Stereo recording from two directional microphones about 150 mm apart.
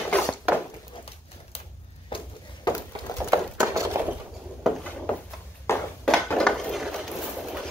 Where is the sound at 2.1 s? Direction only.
35° left (ahead or behind).